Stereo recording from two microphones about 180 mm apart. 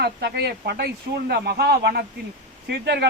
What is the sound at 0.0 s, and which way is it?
Speech, 65° right (ahead or behind).